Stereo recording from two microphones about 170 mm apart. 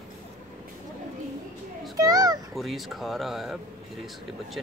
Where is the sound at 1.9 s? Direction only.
20° right (ahead or behind).